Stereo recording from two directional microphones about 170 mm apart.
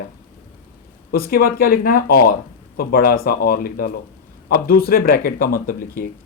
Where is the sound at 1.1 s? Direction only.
60° left (ahead or behind).